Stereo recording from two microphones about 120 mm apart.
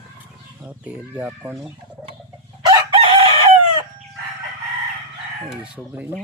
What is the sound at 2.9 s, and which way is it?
Chicken, 50° right (ahead or behind).